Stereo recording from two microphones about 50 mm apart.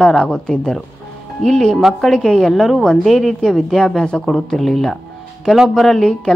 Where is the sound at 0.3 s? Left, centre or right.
Centre.